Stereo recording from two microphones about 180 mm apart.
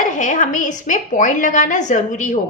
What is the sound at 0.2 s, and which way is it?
A woman's voice, 45° left (ahead or behind).